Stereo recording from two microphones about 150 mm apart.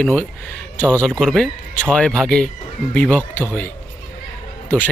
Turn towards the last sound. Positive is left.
turn(degrees=10)  # may be behind; listen again after turning